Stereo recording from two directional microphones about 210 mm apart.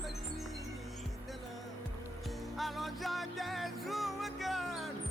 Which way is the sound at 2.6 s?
Centre (ahead or behind).